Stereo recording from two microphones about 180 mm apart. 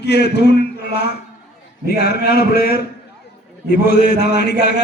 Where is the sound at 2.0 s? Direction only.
60° left (ahead or behind).